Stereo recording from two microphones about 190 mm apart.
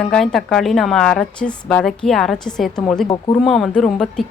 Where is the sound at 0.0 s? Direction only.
5° left (ahead or behind).